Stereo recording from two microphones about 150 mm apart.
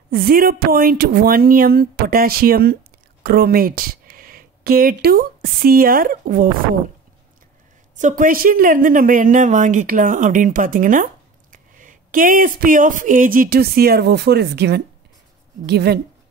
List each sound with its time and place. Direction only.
0.1 s speech: 75° right (ahead or behind)
7.9 s speech: 60° right (ahead or behind); by 16.0 s 90° right